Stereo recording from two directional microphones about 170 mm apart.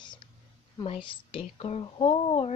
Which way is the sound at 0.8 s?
30° left (ahead or behind).